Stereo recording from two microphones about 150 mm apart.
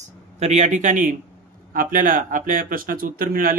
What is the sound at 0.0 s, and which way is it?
Speech, 50° right (ahead or behind).